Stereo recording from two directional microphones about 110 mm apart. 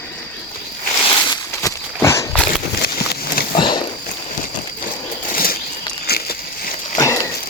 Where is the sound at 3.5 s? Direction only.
45° left (ahead or behind).